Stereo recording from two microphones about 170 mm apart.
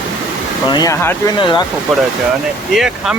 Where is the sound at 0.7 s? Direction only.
20° left (ahead or behind).